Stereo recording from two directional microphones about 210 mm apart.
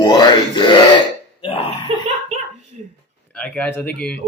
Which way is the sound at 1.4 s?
25° left (ahead or behind).